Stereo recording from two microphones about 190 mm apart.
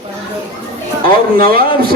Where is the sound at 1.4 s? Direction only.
50° right (ahead or behind).